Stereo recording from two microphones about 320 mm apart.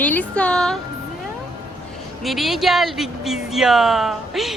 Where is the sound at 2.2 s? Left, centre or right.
Centre.